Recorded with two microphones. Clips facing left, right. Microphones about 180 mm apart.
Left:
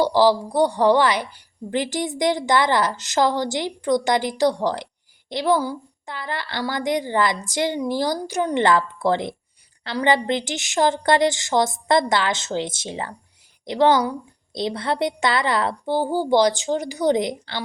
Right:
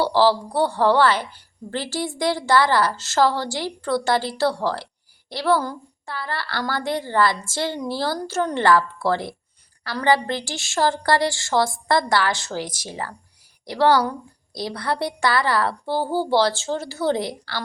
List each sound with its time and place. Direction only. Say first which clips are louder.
0.0 s a woman's voice: left 1 dB; 15° left (ahead or behind)